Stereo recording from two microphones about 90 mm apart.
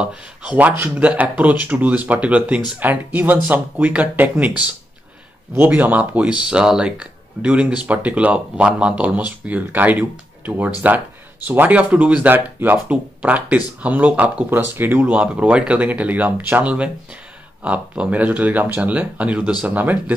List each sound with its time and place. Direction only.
0.0 s speech: 10° right (ahead or behind)